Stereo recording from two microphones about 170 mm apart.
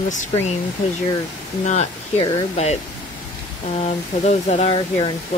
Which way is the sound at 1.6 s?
45° left (ahead or behind).